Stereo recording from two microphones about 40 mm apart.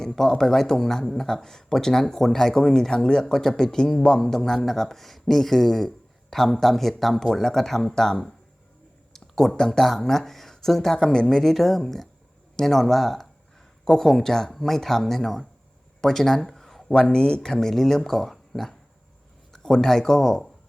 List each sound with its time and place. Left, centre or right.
0.0 s speech: centre
7.9 s speech: centre
17.0 s speech: left